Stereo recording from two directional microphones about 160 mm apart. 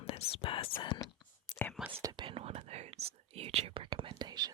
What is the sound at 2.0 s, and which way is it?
Whispering, 30° right (ahead or behind).